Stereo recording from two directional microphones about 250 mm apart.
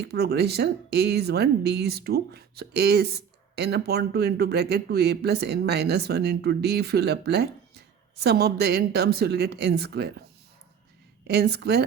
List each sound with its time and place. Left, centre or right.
0.0 s speech: right
11.3 s speech: right